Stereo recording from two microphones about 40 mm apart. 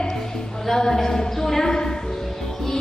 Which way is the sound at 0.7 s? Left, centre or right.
Centre.